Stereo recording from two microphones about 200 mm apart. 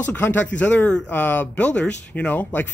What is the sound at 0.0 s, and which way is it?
Speech, 10° left (ahead or behind).